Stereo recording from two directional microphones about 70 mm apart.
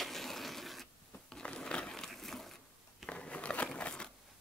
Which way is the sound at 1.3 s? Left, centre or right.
Centre.